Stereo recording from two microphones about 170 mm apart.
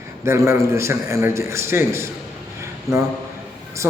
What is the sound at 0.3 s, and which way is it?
A woman's voice, 15° right (ahead or behind).